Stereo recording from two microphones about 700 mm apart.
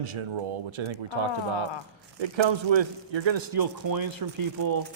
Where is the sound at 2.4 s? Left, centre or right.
Right.